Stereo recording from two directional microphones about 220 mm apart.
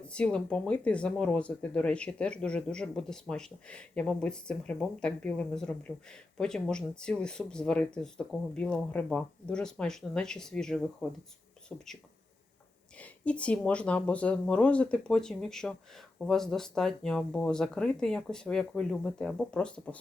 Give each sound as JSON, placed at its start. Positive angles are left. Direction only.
{"t": 0.0, "sound": "speech", "side_deg": 5}
{"t": 13.0, "sound": "speech", "side_deg": 5}